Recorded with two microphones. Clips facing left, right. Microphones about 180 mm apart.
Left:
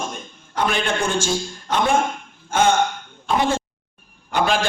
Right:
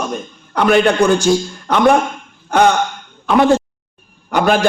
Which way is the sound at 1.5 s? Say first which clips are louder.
Right 4 dB; 60° right (ahead or behind).